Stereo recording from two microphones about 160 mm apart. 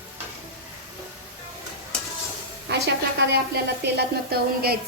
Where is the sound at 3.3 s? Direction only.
90° right.